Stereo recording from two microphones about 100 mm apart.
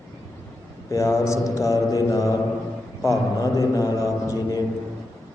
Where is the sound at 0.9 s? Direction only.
30° left (ahead or behind).